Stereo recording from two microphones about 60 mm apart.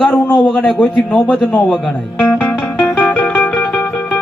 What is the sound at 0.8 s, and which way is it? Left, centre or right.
Speech, left.